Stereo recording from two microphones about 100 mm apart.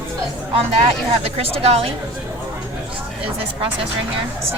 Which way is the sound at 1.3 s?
90° right.